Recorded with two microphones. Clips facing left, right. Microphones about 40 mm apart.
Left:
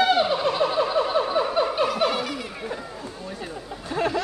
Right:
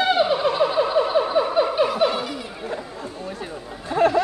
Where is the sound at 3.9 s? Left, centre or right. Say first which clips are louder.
Right 7 dB; centre.